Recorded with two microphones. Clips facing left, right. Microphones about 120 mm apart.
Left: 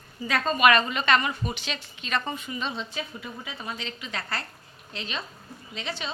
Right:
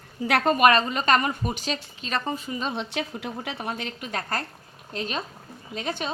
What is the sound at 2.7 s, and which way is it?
A woman's voice, 70° right (ahead or behind).